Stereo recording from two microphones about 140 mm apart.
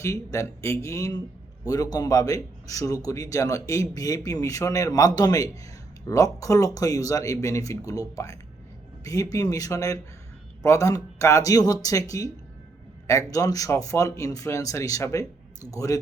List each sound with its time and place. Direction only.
0.0 s a man's voice: 25° left (ahead or behind)
13.3 s a man's voice: 25° left (ahead or behind)